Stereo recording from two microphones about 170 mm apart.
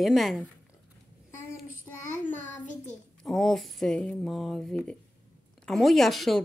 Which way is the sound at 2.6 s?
45° left (ahead or behind).